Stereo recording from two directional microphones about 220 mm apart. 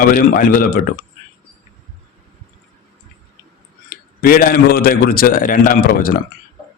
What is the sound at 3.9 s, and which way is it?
A man's voice, 40° left (ahead or behind).